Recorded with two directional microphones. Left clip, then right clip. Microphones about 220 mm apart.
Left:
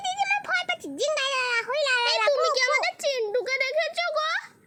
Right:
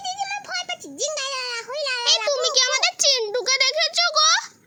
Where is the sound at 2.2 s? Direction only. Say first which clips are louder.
Right 2 dB; 30° right (ahead or behind).